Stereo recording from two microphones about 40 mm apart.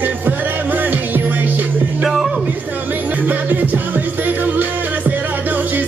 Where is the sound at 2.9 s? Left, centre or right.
Right.